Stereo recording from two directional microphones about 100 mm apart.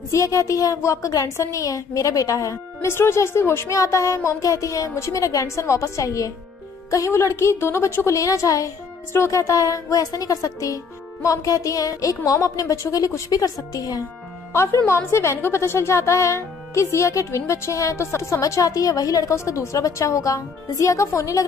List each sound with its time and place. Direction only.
0.1 s speech: 35° left (ahead or behind)
14.5 s speech: 25° left (ahead or behind)